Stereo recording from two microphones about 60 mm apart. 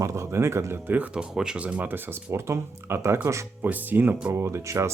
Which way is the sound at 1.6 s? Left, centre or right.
Right.